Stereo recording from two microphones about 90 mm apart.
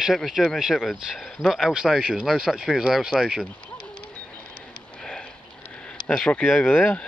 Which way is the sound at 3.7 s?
70° left (ahead or behind).